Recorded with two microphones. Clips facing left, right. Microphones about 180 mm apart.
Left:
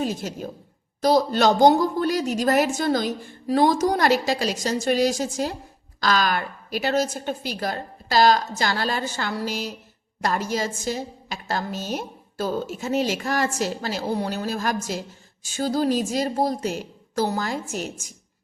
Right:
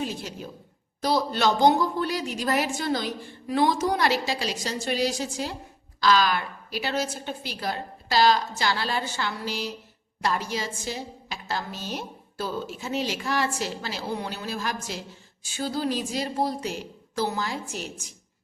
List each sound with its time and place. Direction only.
0.0 s a woman's voice: 45° left (ahead or behind)